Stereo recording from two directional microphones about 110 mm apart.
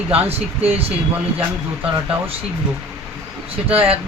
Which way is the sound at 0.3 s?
65° right (ahead or behind).